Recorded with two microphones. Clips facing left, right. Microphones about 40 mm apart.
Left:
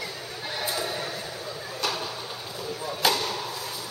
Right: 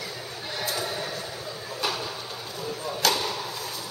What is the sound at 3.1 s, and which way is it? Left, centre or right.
Chop, centre.